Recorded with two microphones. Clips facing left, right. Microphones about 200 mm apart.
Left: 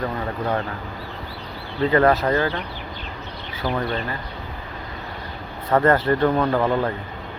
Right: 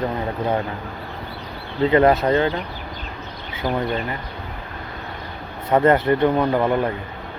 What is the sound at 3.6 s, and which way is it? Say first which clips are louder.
Speech: right 2 dB; 15° right (ahead or behind).